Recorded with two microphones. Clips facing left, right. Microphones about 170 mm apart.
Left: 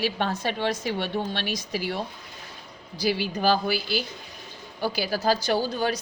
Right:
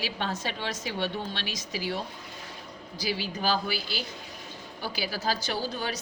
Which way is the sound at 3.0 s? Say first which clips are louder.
Left 6 dB; 55° left (ahead or behind).